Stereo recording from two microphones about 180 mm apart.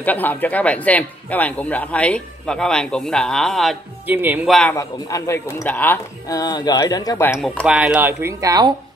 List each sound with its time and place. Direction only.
0.0 s speech: 10° left (ahead or behind)
4.1 s speech: 10° right (ahead or behind)
4.5 s a man's voice: 5° left (ahead or behind)
4.7 s speech: 15° left (ahead or behind)
7.3 s speech: centre (ahead or behind); by 8.7 s 20° right (ahead or behind)